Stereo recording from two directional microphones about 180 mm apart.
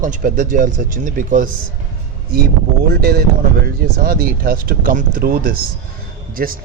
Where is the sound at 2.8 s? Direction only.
60° right (ahead or behind).